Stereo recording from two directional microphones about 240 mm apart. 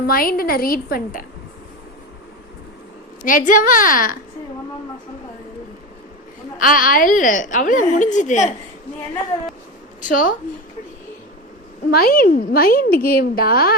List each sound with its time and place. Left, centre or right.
0.1 s a woman's voice: left
3.2 s a woman's voice: left
6.6 s a woman's voice: left
10.0 s a woman's voice: left
11.9 s a woman's voice: left